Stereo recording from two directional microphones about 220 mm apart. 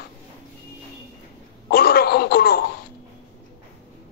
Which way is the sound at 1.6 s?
45° left (ahead or behind).